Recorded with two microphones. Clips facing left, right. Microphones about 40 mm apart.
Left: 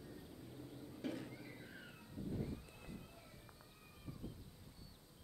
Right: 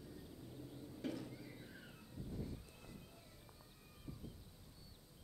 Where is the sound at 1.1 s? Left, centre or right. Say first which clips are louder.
Even; left.